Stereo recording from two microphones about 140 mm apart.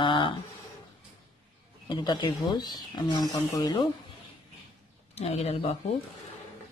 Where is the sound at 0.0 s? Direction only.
35° left (ahead or behind).